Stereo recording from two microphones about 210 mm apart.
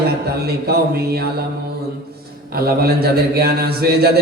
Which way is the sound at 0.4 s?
45° right (ahead or behind).